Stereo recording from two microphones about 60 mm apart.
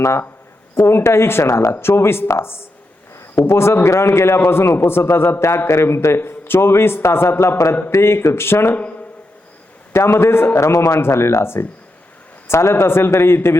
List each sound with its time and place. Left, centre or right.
0.0 s a man's voice: left
9.9 s a man's voice: left